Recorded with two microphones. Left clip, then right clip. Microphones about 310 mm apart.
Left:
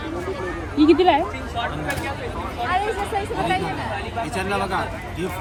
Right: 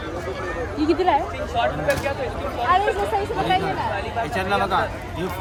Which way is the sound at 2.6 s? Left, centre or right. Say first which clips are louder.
Right 4 dB; right.